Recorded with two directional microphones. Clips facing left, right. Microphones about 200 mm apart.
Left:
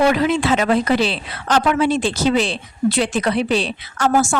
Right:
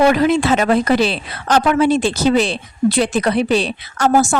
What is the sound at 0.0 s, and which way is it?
A woman's voice, 45° right (ahead or behind).